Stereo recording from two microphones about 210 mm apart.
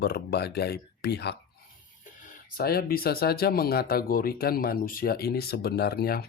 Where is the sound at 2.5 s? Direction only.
45° left (ahead or behind).